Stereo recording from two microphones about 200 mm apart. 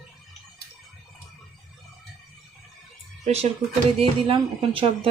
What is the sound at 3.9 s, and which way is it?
Speech, 25° right (ahead or behind).